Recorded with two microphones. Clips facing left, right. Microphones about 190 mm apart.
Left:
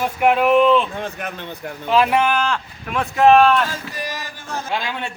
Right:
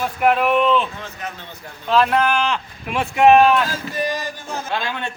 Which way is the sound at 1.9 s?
10° left (ahead or behind).